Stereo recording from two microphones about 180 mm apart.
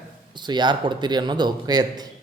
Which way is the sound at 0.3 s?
25° right (ahead or behind).